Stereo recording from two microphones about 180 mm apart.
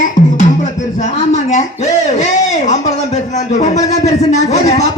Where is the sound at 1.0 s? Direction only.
40° left (ahead or behind).